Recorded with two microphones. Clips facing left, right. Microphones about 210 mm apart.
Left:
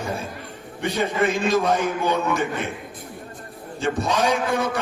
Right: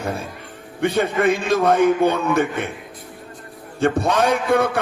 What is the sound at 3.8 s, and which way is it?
A man's voice, 55° right (ahead or behind).